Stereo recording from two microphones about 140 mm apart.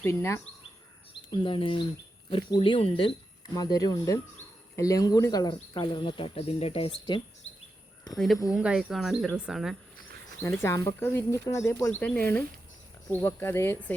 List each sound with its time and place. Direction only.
0.0 s speech: 20° left (ahead or behind)
1.3 s speech: 35° left (ahead or behind)
3.5 s speech: 25° left (ahead or behind); by 7.2 s 45° left (ahead or behind)
8.5 s speech: 5° right (ahead or behind)
10.4 s speech: 20° left (ahead or behind)
11.9 s speech: 10° left (ahead or behind)